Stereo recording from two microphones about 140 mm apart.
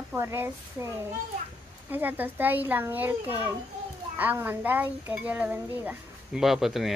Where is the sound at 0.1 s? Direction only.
20° right (ahead or behind).